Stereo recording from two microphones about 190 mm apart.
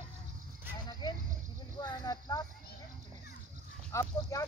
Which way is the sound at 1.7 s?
20° left (ahead or behind).